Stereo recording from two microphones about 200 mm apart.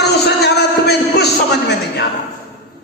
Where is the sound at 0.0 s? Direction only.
55° left (ahead or behind).